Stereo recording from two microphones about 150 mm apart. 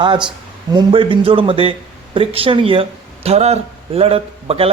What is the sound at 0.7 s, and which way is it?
A man's voice, 35° right (ahead or behind).